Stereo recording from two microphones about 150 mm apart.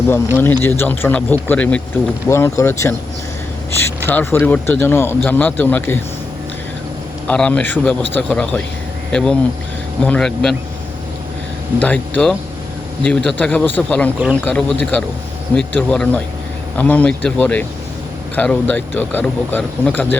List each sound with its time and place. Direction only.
0.3 s speech: 15° left (ahead or behind)
7.3 s speech: 10° left (ahead or behind)
11.8 s speech: 10° left (ahead or behind)